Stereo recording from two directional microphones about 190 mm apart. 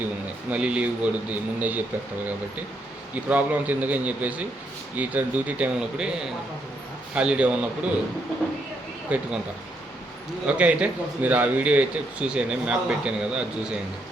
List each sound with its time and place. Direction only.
0.5 s a man's voice: 5° right (ahead or behind)
3.2 s a man's voice: 10° right (ahead or behind)
7.1 s speech: 5° right (ahead or behind)
9.0 s a man's voice: 5° right (ahead or behind)
10.4 s a man's voice: 5° right (ahead or behind)